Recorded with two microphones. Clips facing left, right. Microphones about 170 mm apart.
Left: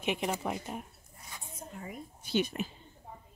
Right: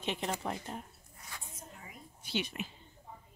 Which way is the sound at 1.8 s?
45° left (ahead or behind).